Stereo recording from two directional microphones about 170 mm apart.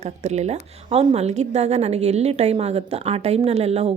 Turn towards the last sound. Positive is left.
turn(degrees=-40)  # may be behind; listen again after turning